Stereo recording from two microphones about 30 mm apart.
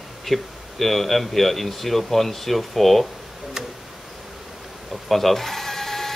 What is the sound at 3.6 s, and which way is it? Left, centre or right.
Tick-tock, right.